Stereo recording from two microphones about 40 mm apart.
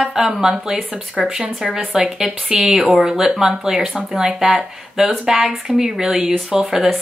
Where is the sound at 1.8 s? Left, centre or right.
Right.